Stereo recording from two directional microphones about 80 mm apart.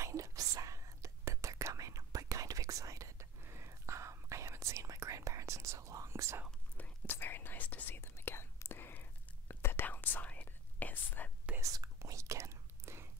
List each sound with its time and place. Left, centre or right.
0.0 s whispering: right
6.8 s whispering: left
11.6 s whispering: right